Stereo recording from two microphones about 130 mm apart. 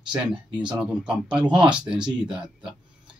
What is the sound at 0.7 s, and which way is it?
Speech, 5° right (ahead or behind).